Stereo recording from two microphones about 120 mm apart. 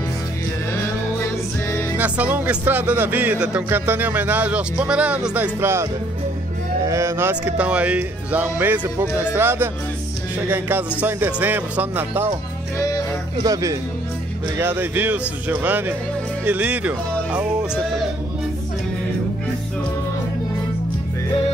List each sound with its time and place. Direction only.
2.0 s speech: 15° right (ahead or behind)
13.4 s speech: 30° right (ahead or behind)
14.6 s speech: 20° right (ahead or behind)